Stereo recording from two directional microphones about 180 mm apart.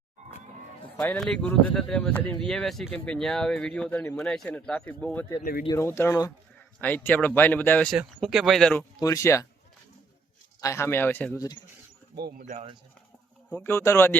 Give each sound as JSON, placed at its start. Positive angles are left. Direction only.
{"t": 0.9, "sound": "speech", "side_deg": 5}
{"t": 5.4, "sound": "speech", "side_deg": 55}
{"t": 5.6, "sound": "speech", "side_deg": 15}
{"t": 7.9, "sound": "speech", "side_deg": 0}
{"t": 9.0, "sound": "speech", "side_deg": 20}
{"t": 10.6, "sound": "speech", "side_deg": 15}
{"t": 12.4, "sound": "speech", "side_deg": -40}
{"t": 13.5, "sound": "speech", "side_deg": 10}